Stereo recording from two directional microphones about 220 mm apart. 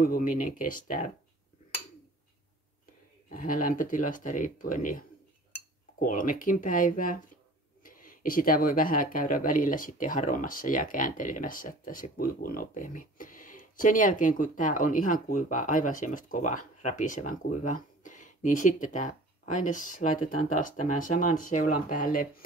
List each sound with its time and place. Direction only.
0.0 s speech: 40° left (ahead or behind)
3.3 s speech: 40° left (ahead or behind)